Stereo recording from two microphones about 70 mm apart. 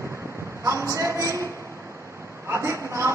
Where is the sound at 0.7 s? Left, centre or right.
Right.